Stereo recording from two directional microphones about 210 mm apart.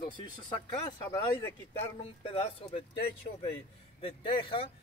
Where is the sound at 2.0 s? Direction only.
25° left (ahead or behind).